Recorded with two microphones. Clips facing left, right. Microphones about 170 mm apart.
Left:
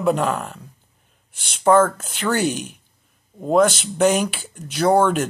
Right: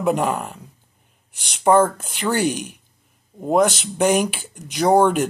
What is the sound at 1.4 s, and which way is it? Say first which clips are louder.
Speech: even; 15° right (ahead or behind).